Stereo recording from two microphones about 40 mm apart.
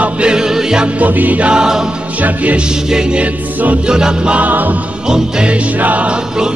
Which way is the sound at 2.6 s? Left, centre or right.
Centre.